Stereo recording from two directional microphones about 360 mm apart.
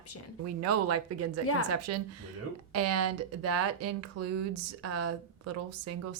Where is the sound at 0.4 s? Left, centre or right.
Right.